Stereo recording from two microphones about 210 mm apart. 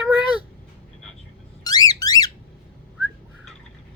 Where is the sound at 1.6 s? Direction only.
20° left (ahead or behind).